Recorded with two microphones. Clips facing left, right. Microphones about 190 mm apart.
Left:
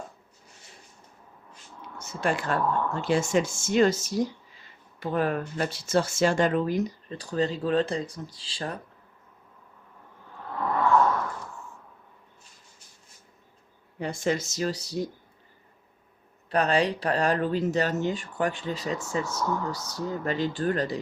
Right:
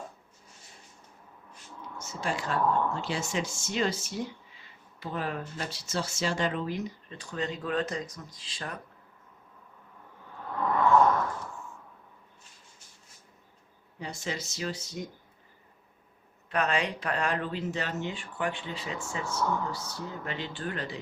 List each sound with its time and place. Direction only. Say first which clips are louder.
2.0 s speech: left 5 dB; 60° left (ahead or behind); by 4.3 s 40° left (ahead or behind)
4.9 s speech: left 7 dB; 50° left (ahead or behind); by 8.8 s 30° left (ahead or behind)
14.0 s speech: left 9 dB; 50° left (ahead or behind); by 15.1 s 35° left (ahead or behind)
16.5 s speech: left 5 dB; 35° left (ahead or behind)